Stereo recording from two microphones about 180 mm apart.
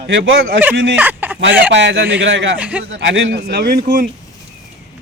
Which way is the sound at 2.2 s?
90° right.